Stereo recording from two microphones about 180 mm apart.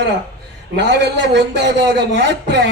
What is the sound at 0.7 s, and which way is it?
A man's voice, 70° right (ahead or behind).